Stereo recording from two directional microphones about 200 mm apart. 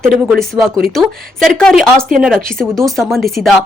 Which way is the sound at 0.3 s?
Centre (ahead or behind).